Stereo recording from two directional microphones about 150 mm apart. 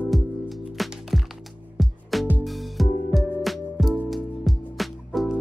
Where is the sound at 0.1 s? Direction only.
Centre (ahead or behind).